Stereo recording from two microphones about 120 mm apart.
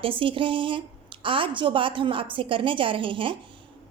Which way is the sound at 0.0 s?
45° right (ahead or behind).